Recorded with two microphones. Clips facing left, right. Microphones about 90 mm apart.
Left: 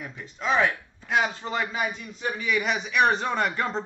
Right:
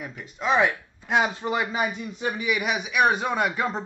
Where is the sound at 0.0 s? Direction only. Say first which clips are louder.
Right 2 dB; 5° right (ahead or behind).